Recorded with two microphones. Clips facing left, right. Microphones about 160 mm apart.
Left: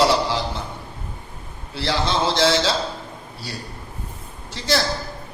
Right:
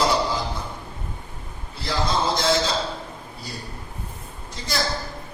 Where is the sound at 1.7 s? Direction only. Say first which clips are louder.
Left 2 dB; 80° left.